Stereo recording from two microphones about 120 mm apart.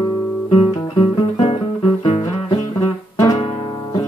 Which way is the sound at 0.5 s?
55° left (ahead or behind).